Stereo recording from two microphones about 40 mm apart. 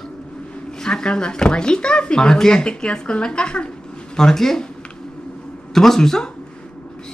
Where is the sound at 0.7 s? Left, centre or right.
Centre.